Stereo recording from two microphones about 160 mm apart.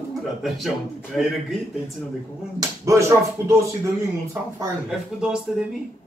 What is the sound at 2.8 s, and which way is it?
Speech, 20° right (ahead or behind).